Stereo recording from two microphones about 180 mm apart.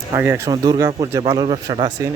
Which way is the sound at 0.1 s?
15° right (ahead or behind).